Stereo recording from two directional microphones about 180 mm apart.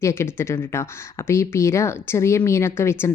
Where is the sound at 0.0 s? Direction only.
15° left (ahead or behind).